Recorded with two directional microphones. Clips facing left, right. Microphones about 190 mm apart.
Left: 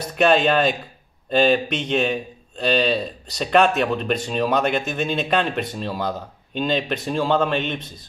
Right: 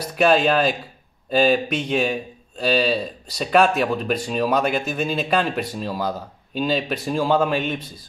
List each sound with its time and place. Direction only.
0.1 s a man's voice: 5° right (ahead or behind)